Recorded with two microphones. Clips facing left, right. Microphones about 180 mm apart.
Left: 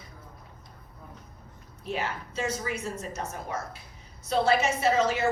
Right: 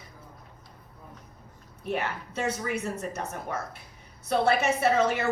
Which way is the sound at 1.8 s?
60° right (ahead or behind).